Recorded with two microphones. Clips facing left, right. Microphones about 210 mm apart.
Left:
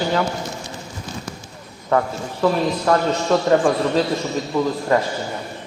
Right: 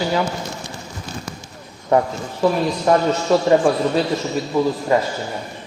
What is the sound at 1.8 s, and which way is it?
A man's voice, 20° right (ahead or behind).